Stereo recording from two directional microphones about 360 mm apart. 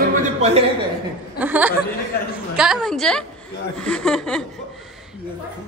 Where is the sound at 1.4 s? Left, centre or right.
Centre.